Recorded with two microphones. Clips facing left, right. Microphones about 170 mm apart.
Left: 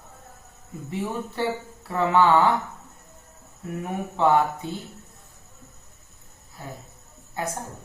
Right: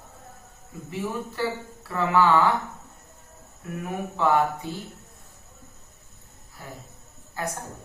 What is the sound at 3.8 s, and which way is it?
Speech, 25° left (ahead or behind).